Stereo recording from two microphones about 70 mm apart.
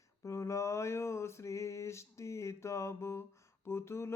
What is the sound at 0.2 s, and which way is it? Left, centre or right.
Mantra, left.